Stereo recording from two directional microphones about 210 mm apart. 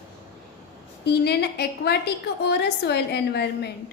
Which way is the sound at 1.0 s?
50° left (ahead or behind).